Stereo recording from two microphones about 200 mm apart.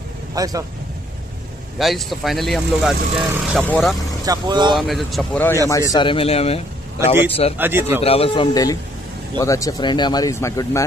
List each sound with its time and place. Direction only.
0.3 s speech: 15° right (ahead or behind)
1.8 s speech: centre (ahead or behind)
4.3 s speech: 20° right (ahead or behind)
4.7 s speech: centre (ahead or behind)
5.7 s speech: 15° left (ahead or behind)
7.5 s speech: 10° right (ahead or behind)
8.0 s speech: 30° left (ahead or behind)